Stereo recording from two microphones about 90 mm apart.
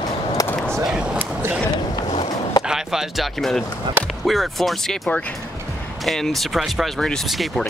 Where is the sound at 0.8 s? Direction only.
5° right (ahead or behind).